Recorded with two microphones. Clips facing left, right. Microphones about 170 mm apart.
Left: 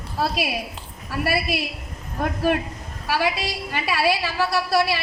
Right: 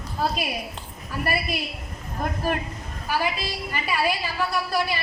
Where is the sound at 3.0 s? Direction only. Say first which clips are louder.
Left 3 dB; 75° left (ahead or behind).